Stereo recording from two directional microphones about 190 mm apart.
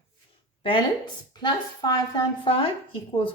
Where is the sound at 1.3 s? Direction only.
20° left (ahead or behind).